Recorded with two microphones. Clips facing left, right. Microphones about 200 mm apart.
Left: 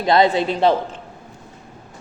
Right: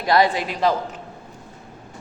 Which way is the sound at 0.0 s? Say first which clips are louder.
Left 3 dB; 25° left (ahead or behind).